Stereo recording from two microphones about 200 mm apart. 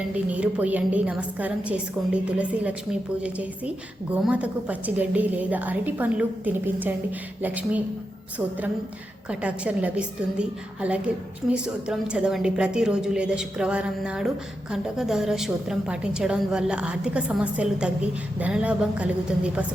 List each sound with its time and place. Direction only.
0.1 s a woman's voice: 5° right (ahead or behind)
9.3 s a woman's voice: 5° right (ahead or behind)